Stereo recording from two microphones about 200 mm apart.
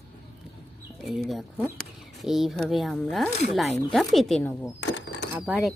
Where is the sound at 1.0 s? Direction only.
Centre (ahead or behind).